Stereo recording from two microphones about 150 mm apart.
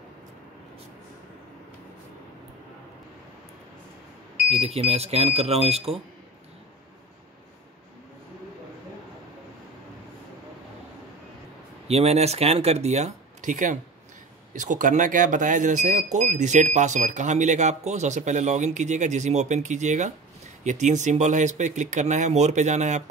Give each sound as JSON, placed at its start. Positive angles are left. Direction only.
{"t": 4.5, "sound": "speech", "side_deg": -45}
{"t": 11.9, "sound": "speech", "side_deg": -45}